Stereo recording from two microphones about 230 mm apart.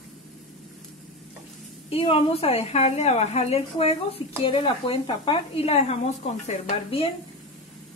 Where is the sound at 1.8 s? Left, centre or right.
Left.